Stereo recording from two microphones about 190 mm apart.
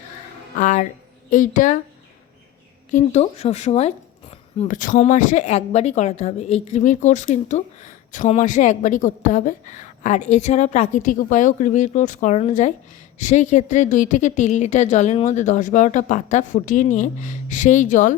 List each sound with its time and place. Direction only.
0.6 s speech: 40° left (ahead or behind)
2.9 s speech: 35° left (ahead or behind)